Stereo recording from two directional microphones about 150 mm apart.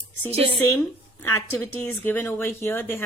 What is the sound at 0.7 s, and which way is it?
Speech, 15° left (ahead or behind).